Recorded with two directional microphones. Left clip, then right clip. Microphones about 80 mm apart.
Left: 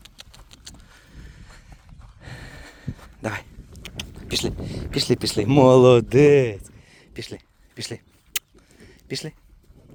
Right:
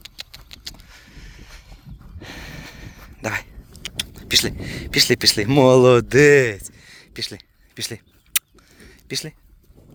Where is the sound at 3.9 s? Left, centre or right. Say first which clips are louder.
Right 9 dB; right.